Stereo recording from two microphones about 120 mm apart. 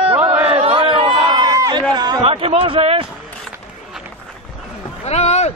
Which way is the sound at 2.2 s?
50° right (ahead or behind).